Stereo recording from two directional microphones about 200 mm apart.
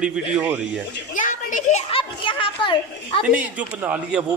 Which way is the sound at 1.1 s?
40° left (ahead or behind).